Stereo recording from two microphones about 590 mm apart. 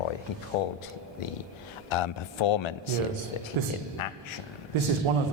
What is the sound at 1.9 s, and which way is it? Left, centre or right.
Speech, left.